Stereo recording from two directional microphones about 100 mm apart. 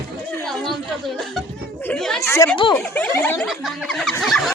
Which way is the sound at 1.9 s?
5° left (ahead or behind).